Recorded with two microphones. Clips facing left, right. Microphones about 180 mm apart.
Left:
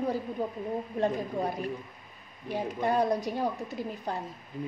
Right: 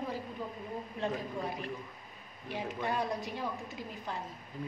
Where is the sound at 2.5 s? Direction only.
40° left (ahead or behind).